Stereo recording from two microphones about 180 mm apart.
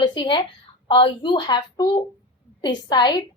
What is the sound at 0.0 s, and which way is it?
A woman's voice, 25° left (ahead or behind).